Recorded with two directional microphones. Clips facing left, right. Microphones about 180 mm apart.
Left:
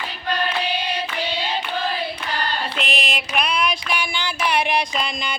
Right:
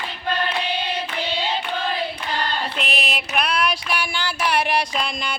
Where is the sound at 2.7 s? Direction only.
5° right (ahead or behind).